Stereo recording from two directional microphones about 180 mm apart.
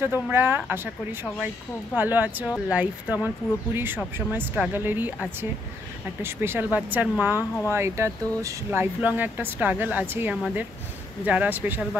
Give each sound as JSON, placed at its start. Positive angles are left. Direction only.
{"t": 0.3, "sound": "speech", "side_deg": -10}
{"t": 2.0, "sound": "speech", "side_deg": -10}
{"t": 7.3, "sound": "speech", "side_deg": 15}
{"t": 7.7, "sound": "speech", "side_deg": -15}